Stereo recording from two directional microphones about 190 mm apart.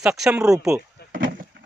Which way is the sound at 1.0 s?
55° left (ahead or behind).